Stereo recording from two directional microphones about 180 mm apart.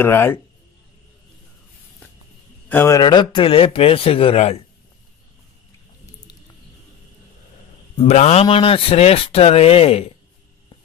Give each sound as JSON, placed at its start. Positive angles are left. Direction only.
{"t": 0.0, "sound": "a man's voice", "side_deg": 15}
{"t": 2.7, "sound": "a man's voice", "side_deg": 10}
{"t": 3.0, "sound": "speech", "side_deg": 25}
{"t": 8.1, "sound": "speech", "side_deg": 40}